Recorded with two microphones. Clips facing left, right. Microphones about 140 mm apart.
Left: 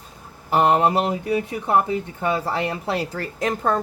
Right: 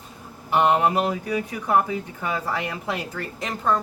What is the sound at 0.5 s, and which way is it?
Speech, 35° left (ahead or behind).